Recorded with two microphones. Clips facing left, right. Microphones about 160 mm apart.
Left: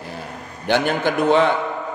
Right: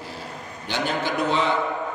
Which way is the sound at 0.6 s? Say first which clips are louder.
Left 7 dB; 55° left (ahead or behind).